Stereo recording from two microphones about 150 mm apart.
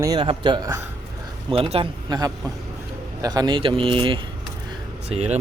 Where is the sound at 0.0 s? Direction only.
25° right (ahead or behind).